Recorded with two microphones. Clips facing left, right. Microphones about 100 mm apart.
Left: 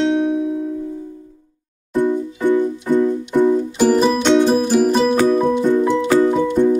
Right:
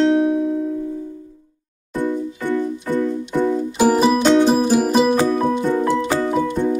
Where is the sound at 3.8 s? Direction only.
10° right (ahead or behind).